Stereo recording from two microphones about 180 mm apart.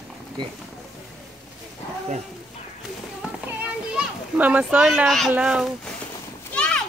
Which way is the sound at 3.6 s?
10° right (ahead or behind).